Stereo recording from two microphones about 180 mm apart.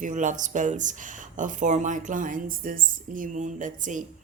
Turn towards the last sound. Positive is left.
turn(degrees=-45)  # may be behind; listen again after turning